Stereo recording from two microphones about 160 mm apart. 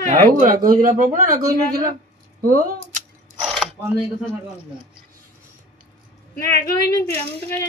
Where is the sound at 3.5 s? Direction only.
Centre (ahead or behind).